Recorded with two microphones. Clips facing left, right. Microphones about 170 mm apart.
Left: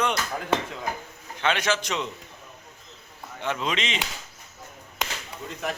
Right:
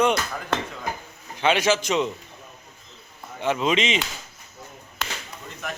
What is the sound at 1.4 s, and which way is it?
Speech, 10° right (ahead or behind).